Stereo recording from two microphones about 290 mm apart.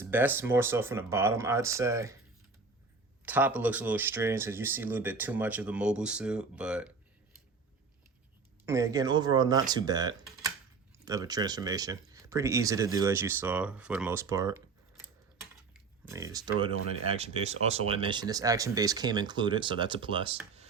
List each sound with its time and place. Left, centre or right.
0.0 s speech: centre
3.2 s speech: centre
8.6 s speech: centre
15.7 s speech: centre